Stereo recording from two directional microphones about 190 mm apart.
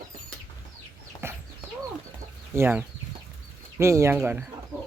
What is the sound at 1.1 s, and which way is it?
Chicken, 20° left (ahead or behind).